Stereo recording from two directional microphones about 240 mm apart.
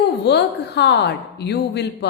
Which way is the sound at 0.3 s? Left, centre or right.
Left.